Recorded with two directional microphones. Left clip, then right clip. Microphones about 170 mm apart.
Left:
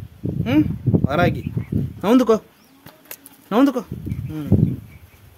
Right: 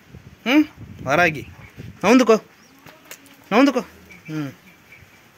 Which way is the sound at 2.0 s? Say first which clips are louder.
Right 2 dB; 15° left (ahead or behind).